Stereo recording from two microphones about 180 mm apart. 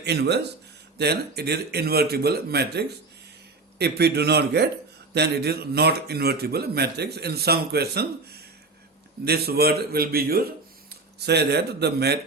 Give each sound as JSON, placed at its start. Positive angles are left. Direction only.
{"t": 0.0, "sound": "a man's voice", "side_deg": -70}